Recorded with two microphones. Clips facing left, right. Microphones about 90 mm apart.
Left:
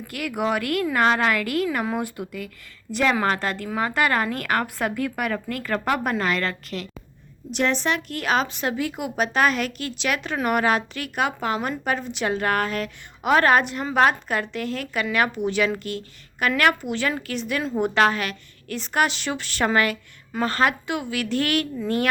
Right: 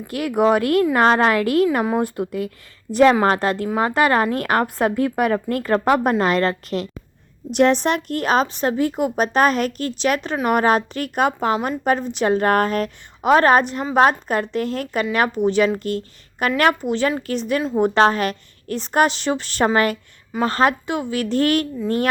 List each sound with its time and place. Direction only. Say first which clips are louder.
0.1 s speech: right 8 dB; 40° right (ahead or behind)
7.5 s speech: right 7 dB; 45° right (ahead or behind)
13.2 s speech: right 4 dB; 30° right (ahead or behind)